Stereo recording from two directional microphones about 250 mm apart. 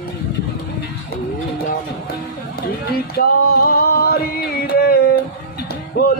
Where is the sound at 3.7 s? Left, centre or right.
Left.